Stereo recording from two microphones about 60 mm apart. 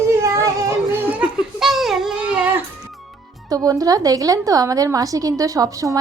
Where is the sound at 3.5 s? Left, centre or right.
Right.